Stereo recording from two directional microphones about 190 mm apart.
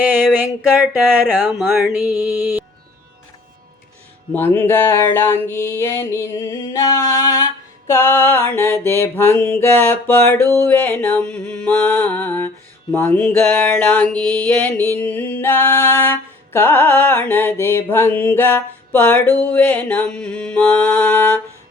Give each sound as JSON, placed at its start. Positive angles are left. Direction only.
{"t": 1.3, "sound": "a sound", "side_deg": -10}
{"t": 2.0, "sound": "music", "side_deg": 15}
{"t": 4.4, "sound": "music", "side_deg": 10}
{"t": 14.2, "sound": "mantra", "side_deg": -20}
{"t": 14.4, "sound": "music", "side_deg": 5}